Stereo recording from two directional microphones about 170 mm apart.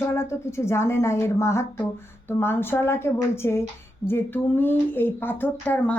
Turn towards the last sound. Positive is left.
turn(degrees=10)  # may be behind; listen again after turning